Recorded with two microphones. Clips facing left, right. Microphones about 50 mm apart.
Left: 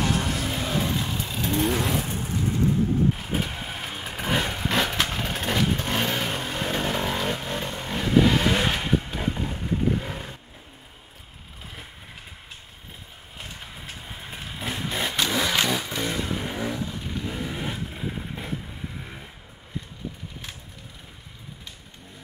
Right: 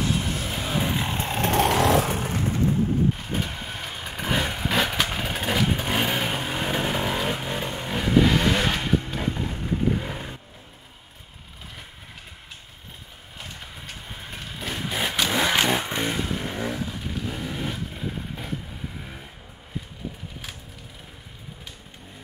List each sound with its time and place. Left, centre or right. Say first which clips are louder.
0.1 s music: left 1 dB; left
0.4 s music: left 1 dB; centre
0.7 s vehicle: right 2 dB; centre
1.0 s vehicle: right 4 dB; right
1.5 s vehicle: right 5 dB; right
3.2 s vehicle: left 1 dB; centre
13.7 s vehicle: even; centre
15.0 s vehicle: right 2 dB; centre
15.3 s vehicle: right 4 dB; centre
16.3 s vehicle: even; centre
18.9 s a sound: even; centre